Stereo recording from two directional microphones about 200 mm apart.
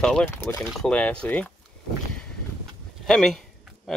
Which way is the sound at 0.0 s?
5° left (ahead or behind).